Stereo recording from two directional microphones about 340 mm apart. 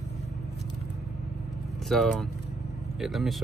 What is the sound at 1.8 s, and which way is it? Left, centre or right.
Speech, centre.